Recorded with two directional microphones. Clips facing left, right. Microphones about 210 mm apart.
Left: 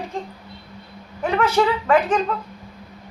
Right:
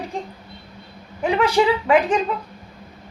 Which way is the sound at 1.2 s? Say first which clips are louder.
Right 1 dB; 15° right (ahead or behind).